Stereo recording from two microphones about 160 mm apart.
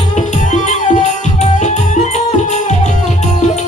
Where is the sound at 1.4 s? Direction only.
50° left (ahead or behind).